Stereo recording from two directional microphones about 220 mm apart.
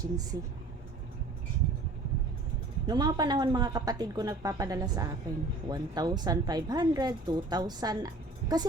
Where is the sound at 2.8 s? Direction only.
20° right (ahead or behind).